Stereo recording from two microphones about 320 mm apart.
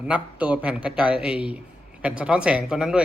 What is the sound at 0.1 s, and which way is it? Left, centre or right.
Speech, centre.